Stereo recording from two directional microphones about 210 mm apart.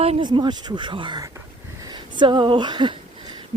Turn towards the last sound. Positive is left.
turn(degrees=-20)  # may be behind; listen again after turning